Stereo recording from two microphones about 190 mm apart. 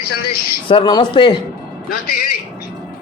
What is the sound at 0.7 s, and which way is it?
Speech, 25° left (ahead or behind).